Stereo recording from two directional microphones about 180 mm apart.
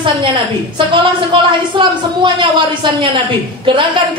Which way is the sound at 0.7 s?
25° right (ahead or behind).